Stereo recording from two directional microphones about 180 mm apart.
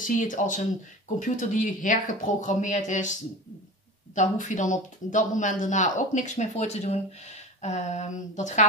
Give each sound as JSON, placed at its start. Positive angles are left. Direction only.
{"t": 0.0, "sound": "speech", "side_deg": 45}